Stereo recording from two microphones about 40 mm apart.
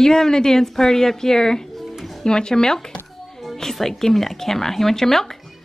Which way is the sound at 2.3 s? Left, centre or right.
Centre.